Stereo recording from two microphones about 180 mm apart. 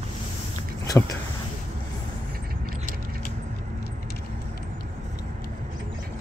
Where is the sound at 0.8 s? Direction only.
20° left (ahead or behind).